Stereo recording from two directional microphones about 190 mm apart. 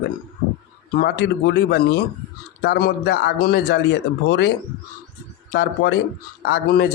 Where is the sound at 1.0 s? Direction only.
60° left (ahead or behind).